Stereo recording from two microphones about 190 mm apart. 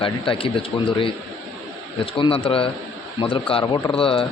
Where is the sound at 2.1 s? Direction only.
30° left (ahead or behind).